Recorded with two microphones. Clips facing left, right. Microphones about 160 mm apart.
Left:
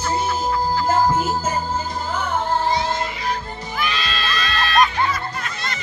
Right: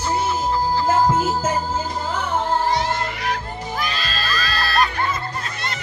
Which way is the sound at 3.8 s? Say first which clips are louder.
Left 5 dB; 35° right (ahead or behind).